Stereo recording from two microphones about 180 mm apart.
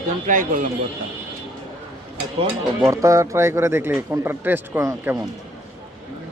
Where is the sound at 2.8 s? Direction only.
15° right (ahead or behind).